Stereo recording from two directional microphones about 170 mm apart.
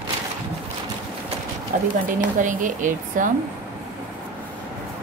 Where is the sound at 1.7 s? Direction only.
50° right (ahead or behind).